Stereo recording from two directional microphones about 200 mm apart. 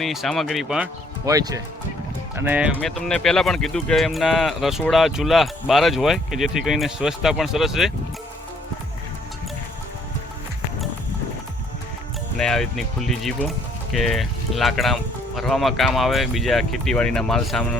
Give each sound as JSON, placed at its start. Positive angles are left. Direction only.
{"t": 0.0, "sound": "speech", "side_deg": 0}
{"t": 1.2, "sound": "speech", "side_deg": -15}
{"t": 12.4, "sound": "speech", "side_deg": 0}